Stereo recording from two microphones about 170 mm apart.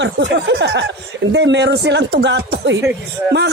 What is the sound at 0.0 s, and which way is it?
Speech, 85° right.